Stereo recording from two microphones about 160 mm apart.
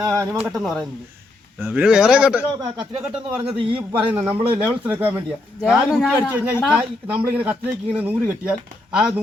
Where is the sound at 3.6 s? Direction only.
35° right (ahead or behind).